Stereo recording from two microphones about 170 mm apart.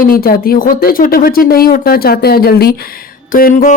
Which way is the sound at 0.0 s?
60° left (ahead or behind).